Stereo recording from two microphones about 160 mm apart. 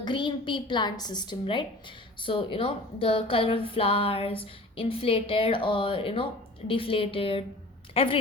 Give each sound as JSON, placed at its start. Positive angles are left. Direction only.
{"t": 0.0, "sound": "a woman's voice", "side_deg": 30}